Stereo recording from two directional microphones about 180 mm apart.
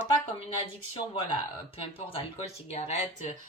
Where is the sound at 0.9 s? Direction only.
30° left (ahead or behind).